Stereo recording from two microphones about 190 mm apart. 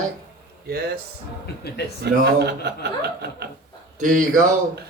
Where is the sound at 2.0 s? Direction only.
60° right (ahead or behind).